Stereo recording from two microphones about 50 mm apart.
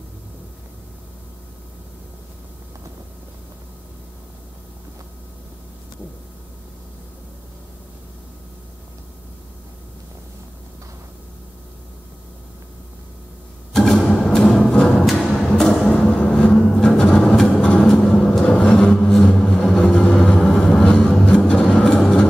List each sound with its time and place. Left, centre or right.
13.7 s music: centre
16.6 s a sound: centre
19.8 s vehicle: left
20.1 s music: centre